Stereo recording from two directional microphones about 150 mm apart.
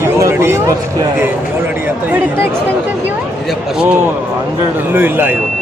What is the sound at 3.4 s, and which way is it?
Speech, 5° right (ahead or behind).